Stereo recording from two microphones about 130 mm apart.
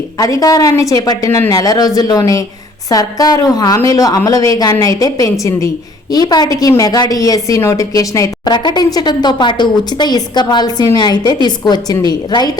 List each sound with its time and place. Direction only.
0.2 s a woman's voice: 25° left (ahead or behind)